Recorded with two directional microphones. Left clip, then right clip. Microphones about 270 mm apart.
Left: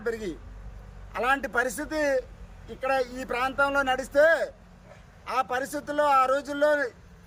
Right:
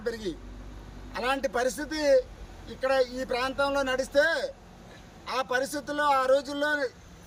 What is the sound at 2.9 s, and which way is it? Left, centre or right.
Speech, left.